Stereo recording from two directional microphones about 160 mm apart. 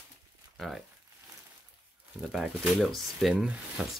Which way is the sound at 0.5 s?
Centre (ahead or behind).